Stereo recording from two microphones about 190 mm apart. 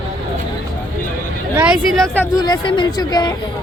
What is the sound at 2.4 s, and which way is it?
Speech, 25° left (ahead or behind).